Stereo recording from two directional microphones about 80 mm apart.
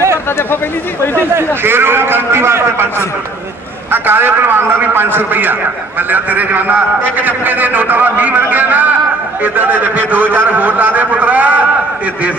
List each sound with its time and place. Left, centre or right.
1.1 s a man's voice: right
3.9 s a man's voice: right